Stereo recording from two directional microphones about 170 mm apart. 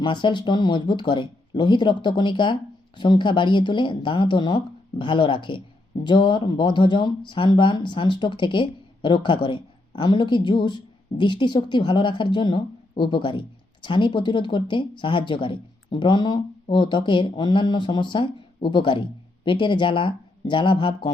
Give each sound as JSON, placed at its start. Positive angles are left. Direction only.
{"t": 0.0, "sound": "speech", "side_deg": 25}